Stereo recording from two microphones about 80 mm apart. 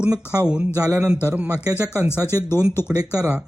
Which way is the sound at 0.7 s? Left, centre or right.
Right.